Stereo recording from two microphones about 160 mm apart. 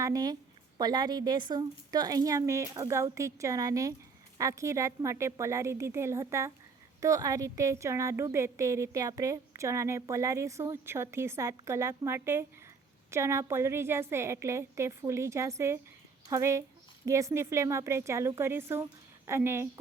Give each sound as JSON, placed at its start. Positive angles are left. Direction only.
{"t": 0.0, "sound": "a woman's voice", "side_deg": -25}